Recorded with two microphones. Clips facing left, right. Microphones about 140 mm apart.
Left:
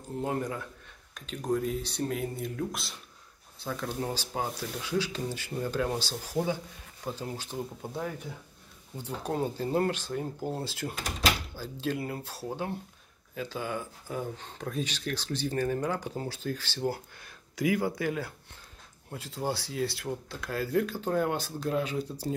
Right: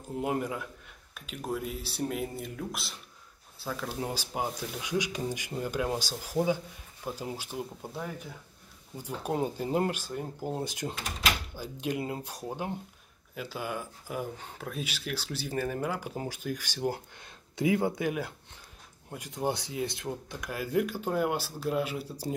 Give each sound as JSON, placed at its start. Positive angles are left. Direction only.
{"t": 0.2, "sound": "speech", "side_deg": -10}
{"t": 7.8, "sound": "speech", "side_deg": 0}
{"t": 8.9, "sound": "speech", "side_deg": -10}